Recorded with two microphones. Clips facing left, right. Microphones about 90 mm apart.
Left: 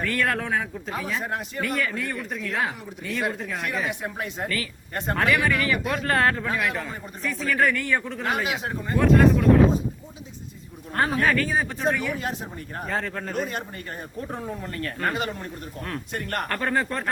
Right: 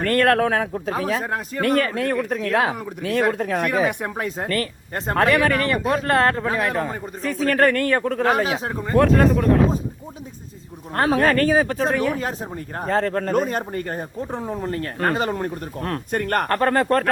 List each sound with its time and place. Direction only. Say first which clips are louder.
0.0 s speech: right 8 dB; 60° right (ahead or behind); by 1.6 s 40° right (ahead or behind)
1.9 s speech: right 8 dB; 65° right (ahead or behind)
8.2 s speech: right 7 dB; 40° right (ahead or behind)
10.9 s speech: right 4 dB; 50° right (ahead or behind); by 11.8 s 70° right (ahead or behind)
11.9 s speech: right 4 dB; 40° right (ahead or behind)
14.2 s speech: right 2 dB; 25° right (ahead or behind); by 17.1 s 60° right (ahead or behind)